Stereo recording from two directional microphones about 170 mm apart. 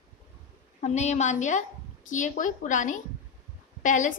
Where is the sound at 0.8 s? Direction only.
40° left (ahead or behind).